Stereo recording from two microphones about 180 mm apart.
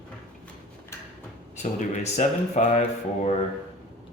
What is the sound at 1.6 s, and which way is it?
Speech, 40° left (ahead or behind).